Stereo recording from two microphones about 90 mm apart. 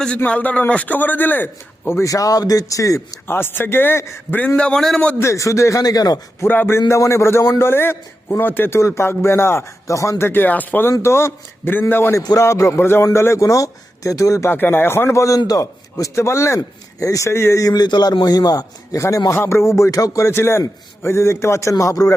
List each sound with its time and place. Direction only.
0.2 s a man's voice: 15° left (ahead or behind)
2.0 s a man's voice: 40° left (ahead or behind)
3.3 s a man's voice: 25° left (ahead or behind)
4.4 s a man's voice: 15° left (ahead or behind)
5.2 s a man's voice: 35° left (ahead or behind)
6.4 s a man's voice: 25° left (ahead or behind)
14.5 s a man's voice: 20° left (ahead or behind); by 22.1 s 40° left (ahead or behind)